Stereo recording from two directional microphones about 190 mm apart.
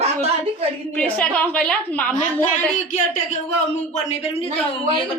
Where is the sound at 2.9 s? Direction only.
40° left (ahead or behind).